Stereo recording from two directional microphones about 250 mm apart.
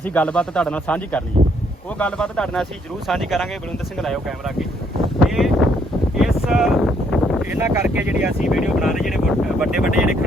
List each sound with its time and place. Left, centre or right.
0.0 s speech: centre
5.3 s a sound: centre
6.1 s speech: centre